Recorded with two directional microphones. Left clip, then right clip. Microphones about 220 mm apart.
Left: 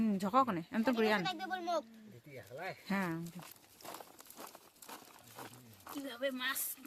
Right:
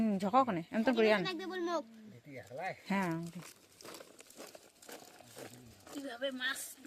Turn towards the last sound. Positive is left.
turn(degrees=50)  # may be behind; listen again after turning